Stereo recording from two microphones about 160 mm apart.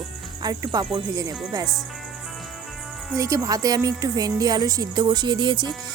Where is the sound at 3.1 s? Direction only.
20° right (ahead or behind).